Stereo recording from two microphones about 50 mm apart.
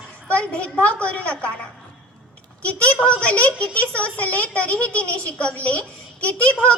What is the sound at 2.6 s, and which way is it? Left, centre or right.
A woman's voice, left.